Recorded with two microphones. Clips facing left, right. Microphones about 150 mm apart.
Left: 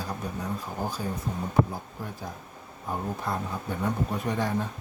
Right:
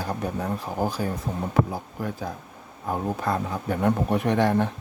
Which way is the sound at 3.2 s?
75° right (ahead or behind).